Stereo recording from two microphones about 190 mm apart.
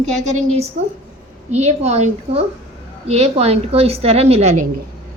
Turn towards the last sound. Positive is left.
turn(degrees=-35)  # may be behind; listen again after turning